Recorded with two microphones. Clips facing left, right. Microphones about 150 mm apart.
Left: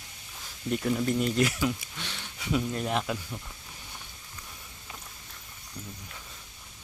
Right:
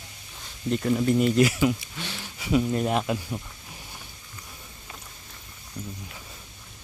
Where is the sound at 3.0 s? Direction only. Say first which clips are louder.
Right 5 dB; 15° right (ahead or behind).